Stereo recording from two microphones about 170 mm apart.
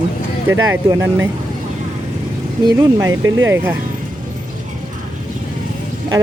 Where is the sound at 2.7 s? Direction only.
20° right (ahead or behind).